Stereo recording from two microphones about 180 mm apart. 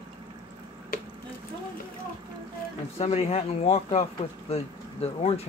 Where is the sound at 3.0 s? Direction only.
35° left (ahead or behind).